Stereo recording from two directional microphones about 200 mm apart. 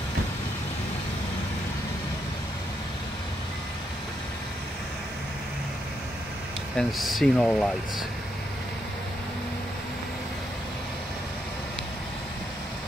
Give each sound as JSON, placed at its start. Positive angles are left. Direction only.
{"t": 6.8, "sound": "speech", "side_deg": 0}